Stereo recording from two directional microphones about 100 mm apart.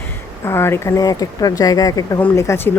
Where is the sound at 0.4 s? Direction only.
25° left (ahead or behind).